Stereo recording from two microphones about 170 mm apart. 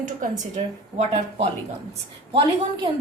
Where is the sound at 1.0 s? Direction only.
40° right (ahead or behind).